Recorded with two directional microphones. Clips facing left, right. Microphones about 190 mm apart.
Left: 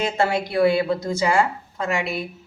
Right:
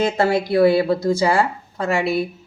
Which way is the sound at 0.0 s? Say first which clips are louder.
Right 4 dB; 35° right (ahead or behind).